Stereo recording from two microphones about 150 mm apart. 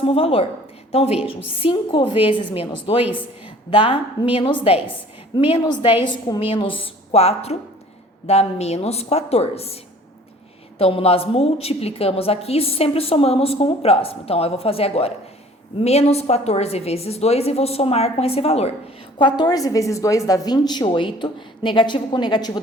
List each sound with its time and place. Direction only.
0.0 s a woman's voice: 40° left (ahead or behind)
6.5 s a woman's voice: 35° left (ahead or behind)
10.8 s a woman's voice: 40° left (ahead or behind)
19.2 s a woman's voice: 30° left (ahead or behind)